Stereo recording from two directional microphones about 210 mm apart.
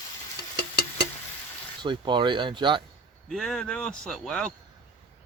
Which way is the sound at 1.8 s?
20° right (ahead or behind).